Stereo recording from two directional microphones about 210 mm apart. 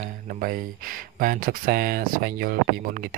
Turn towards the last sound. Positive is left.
turn(degrees=-45)  # may be behind; listen again after turning